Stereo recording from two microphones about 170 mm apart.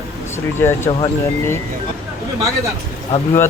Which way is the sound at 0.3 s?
15° left (ahead or behind).